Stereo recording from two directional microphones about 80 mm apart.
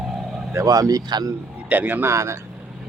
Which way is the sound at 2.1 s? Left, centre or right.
Right.